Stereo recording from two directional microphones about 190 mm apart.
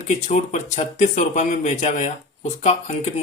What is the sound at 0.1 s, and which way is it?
Speech, 40° left (ahead or behind).